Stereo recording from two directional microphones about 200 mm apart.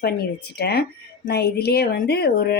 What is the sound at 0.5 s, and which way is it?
Speech, 50° left (ahead or behind).